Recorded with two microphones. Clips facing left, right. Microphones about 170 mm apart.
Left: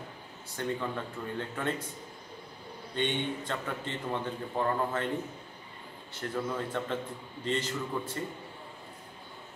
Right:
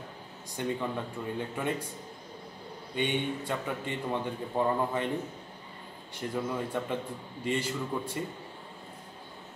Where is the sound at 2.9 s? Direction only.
10° right (ahead or behind).